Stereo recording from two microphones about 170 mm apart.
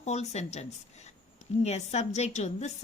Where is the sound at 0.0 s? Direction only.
40° left (ahead or behind).